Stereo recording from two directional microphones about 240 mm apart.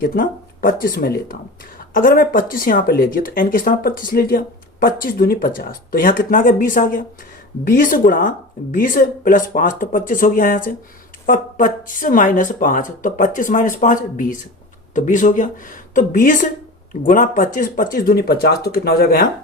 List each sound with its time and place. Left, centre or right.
0.0 s speech: left